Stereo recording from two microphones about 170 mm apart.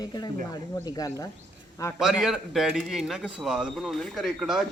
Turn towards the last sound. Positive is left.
turn(degrees=0)  # may be behind; listen again after turning